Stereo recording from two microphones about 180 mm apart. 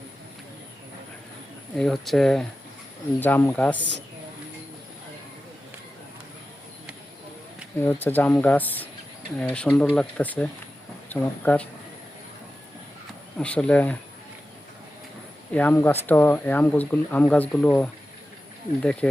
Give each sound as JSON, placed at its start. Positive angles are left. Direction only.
{"t": 1.8, "sound": "speech", "side_deg": 0}
{"t": 3.8, "sound": "speech", "side_deg": -80}
{"t": 7.8, "sound": "speech", "side_deg": 10}
{"t": 13.4, "sound": "speech", "side_deg": 5}
{"t": 15.5, "sound": "speech", "side_deg": 10}